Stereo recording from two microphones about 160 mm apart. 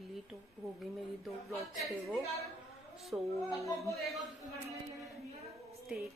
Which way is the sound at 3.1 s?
10° right (ahead or behind).